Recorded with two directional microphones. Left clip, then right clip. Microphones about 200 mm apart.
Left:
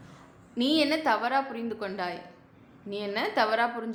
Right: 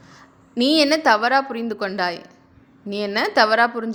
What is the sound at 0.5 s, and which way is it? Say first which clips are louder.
A woman's voice: right 8 dB; 45° right (ahead or behind).